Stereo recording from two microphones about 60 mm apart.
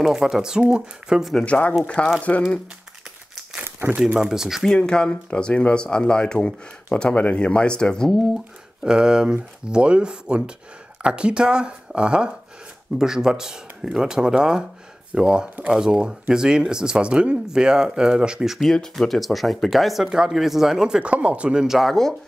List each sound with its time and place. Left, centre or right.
0.0 s speech: centre
1.4 s speech: left
4.2 s speech: centre
4.6 s speech: centre
8.8 s speech: centre
18.6 s speech: centre
21.6 s speech: centre